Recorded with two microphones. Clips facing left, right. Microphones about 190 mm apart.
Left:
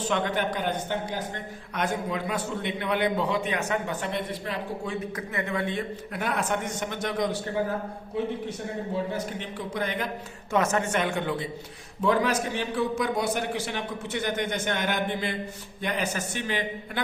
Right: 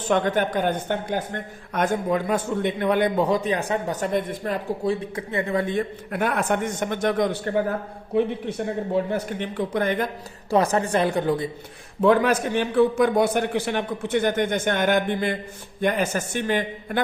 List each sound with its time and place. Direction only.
0.1 s a woman's voice: 45° right (ahead or behind)
9.1 s speech: 55° right (ahead or behind)
10.5 s a man's voice: 35° right (ahead or behind)
11.9 s a woman's voice: 60° right (ahead or behind)